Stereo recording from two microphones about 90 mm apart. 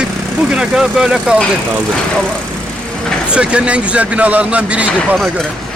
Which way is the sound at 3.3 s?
10° right (ahead or behind).